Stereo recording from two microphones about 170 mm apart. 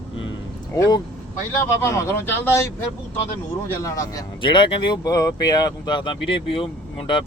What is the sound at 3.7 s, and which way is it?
Speech, 20° left (ahead or behind).